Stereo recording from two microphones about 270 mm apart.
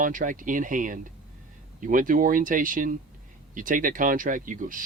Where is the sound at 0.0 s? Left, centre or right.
Right.